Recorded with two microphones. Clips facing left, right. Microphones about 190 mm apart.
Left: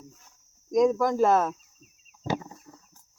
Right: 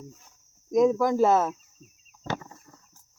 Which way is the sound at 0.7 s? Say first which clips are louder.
Right 1 dB; 5° right (ahead or behind).